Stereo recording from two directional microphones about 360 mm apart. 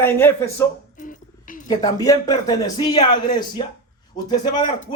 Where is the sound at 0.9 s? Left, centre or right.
Left.